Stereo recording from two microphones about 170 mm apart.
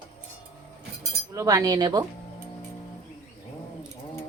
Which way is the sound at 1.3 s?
20° right (ahead or behind).